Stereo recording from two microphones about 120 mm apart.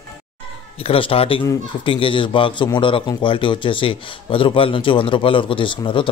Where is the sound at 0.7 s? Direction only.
50° left (ahead or behind).